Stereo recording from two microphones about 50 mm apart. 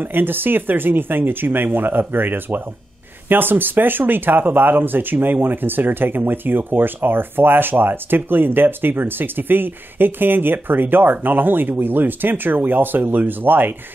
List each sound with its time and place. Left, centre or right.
0.0 s speech: right